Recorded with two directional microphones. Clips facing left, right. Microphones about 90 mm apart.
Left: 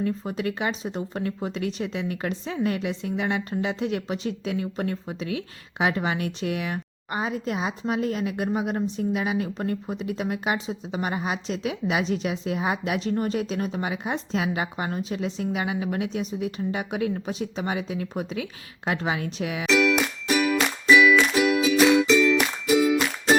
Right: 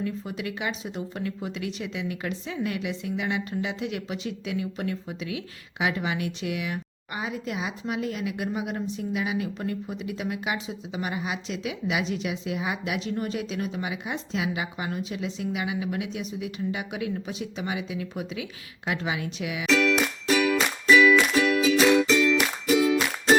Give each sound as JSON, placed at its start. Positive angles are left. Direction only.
{"t": 0.0, "sound": "a woman's voice", "side_deg": 40}
{"t": 19.7, "sound": "music", "side_deg": 15}
{"t": 20.6, "sound": "music", "side_deg": 0}
{"t": 21.8, "sound": "music", "side_deg": 5}